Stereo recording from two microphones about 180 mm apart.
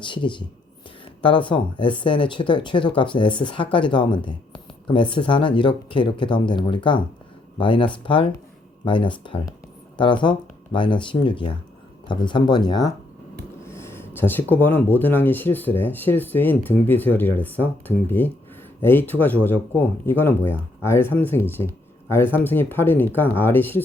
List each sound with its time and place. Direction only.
0.0 s speech: 25° left (ahead or behind)